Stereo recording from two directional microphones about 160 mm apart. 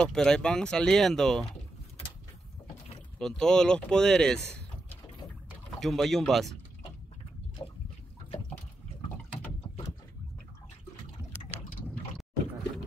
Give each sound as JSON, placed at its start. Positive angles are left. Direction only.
{"t": 0.0, "sound": "speech", "side_deg": 5}
{"t": 3.2, "sound": "speech", "side_deg": 5}
{"t": 5.8, "sound": "speech", "side_deg": 0}
{"t": 7.6, "sound": "a sound", "side_deg": 25}